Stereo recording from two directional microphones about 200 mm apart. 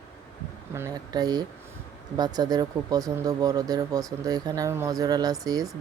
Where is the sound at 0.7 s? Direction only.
15° right (ahead or behind).